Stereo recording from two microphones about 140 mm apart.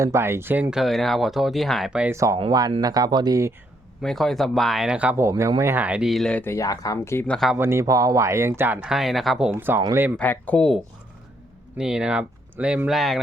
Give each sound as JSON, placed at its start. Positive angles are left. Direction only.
{"t": 0.0, "sound": "speech", "side_deg": -20}
{"t": 2.1, "sound": "speech", "side_deg": -20}
{"t": 4.0, "sound": "speech", "side_deg": 0}
{"t": 6.4, "sound": "speech", "side_deg": 20}
{"t": 7.3, "sound": "speech", "side_deg": 5}
{"t": 7.5, "sound": "speech", "side_deg": -15}
{"t": 10.2, "sound": "speech", "side_deg": 10}
{"t": 11.8, "sound": "speech", "side_deg": -5}